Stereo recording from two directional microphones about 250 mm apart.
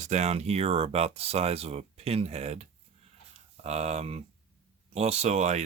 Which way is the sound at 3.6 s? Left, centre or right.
Right.